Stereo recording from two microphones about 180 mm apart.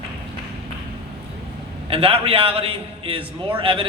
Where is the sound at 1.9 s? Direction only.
30° right (ahead or behind).